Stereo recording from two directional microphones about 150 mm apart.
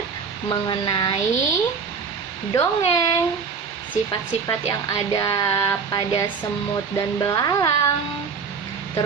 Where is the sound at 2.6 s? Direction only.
25° left (ahead or behind).